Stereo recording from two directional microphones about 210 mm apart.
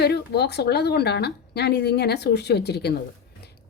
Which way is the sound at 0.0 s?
50° left (ahead or behind).